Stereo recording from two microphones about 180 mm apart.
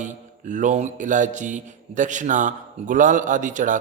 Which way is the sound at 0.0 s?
45° right (ahead or behind).